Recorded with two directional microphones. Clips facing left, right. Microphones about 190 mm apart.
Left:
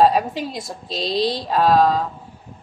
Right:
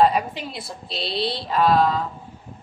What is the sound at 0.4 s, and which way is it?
Speech, 40° left (ahead or behind).